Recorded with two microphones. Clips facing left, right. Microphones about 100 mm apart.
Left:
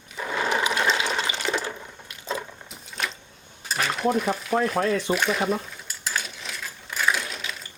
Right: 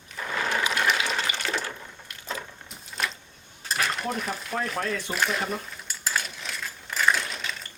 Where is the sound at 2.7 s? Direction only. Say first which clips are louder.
Right 1 dB; centre (ahead or behind).